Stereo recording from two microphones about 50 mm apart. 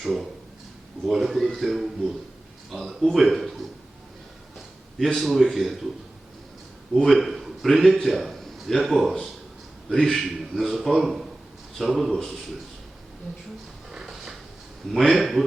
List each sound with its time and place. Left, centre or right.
0.0 s a man's voice: centre
4.9 s a man's voice: centre
6.9 s a man's voice: centre
9.9 s a man's voice: centre
13.9 s a sound: centre
14.9 s a man's voice: centre